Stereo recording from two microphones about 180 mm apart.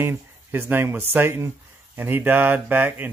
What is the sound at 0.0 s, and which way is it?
Speech, 15° right (ahead or behind).